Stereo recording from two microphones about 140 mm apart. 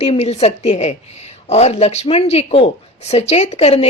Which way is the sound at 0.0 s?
45° left (ahead or behind).